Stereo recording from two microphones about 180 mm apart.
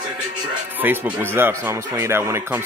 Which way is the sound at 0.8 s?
10° right (ahead or behind).